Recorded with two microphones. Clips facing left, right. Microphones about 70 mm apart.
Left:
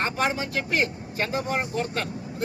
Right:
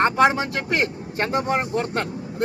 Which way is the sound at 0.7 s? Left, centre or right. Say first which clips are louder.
Right 3 dB; right.